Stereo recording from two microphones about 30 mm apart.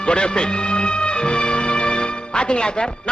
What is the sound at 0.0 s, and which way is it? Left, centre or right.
A man's voice, left.